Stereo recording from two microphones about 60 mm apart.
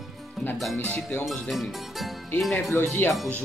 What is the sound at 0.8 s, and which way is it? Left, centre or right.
Speech, left.